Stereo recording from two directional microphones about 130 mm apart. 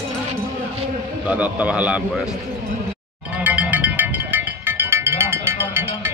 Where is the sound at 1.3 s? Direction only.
10° right (ahead or behind).